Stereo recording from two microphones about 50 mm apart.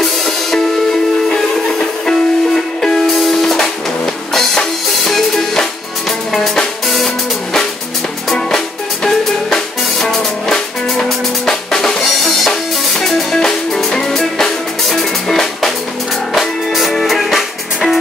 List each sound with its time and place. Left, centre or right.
0.0 s music: centre
8.3 s music: centre